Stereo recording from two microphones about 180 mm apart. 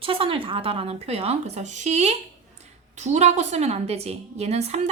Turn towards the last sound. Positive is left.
turn(degrees=-35)  # may be behind; listen again after turning